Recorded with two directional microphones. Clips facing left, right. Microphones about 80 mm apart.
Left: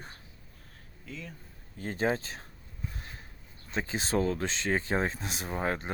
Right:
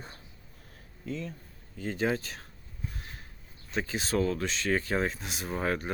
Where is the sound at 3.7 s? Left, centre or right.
Left.